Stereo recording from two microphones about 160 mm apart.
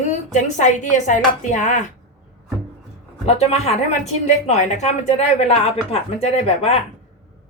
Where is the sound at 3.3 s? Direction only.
40° left (ahead or behind).